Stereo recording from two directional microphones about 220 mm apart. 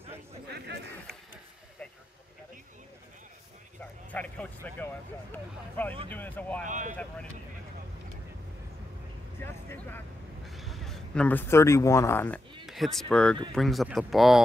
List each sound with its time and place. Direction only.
0.5 s a sound: 50° right (ahead or behind)
3.8 s a sound: 5° left (ahead or behind)
5.3 s speech: 5° left (ahead or behind)
6.6 s speech: 35° right (ahead or behind)
9.4 s a man's voice: 10° left (ahead or behind)
12.6 s speech: centre (ahead or behind)